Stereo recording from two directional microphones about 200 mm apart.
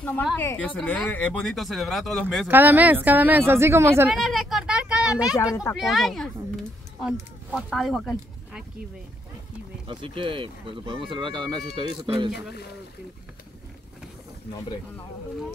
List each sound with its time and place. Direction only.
0.0 s a woman's voice: 10° left (ahead or behind); by 4.1 s 10° right (ahead or behind)
4.1 s speech: centre (ahead or behind)
5.3 s speech: 15° left (ahead or behind)
5.8 s speech: centre (ahead or behind)
7.5 s speech: centre (ahead or behind)
9.8 s speech: 25° right (ahead or behind)